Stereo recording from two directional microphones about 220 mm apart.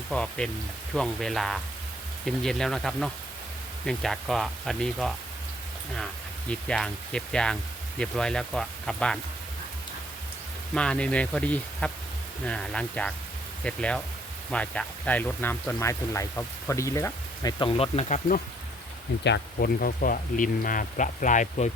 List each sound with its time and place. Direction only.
0.1 s speech: 5° left (ahead or behind)
6.5 s speech: 5° left (ahead or behind)
10.8 s speech: 5° left (ahead or behind); by 18.3 s 30° left (ahead or behind)
19.2 s speech: 50° left (ahead or behind)